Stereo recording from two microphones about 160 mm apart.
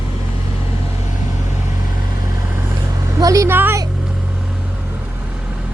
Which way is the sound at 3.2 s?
20° right (ahead or behind).